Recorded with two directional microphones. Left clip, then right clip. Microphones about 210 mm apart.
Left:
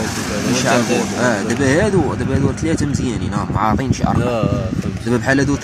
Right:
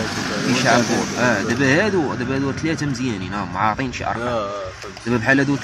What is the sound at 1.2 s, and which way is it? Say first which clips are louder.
Speech: left 1 dB; 15° left (ahead or behind).